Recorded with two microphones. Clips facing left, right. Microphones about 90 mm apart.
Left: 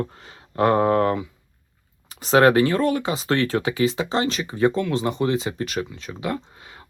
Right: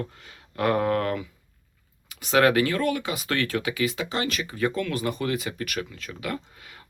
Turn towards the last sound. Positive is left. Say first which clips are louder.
# left 4 dB
turn(degrees=25)  # may be behind; listen again after turning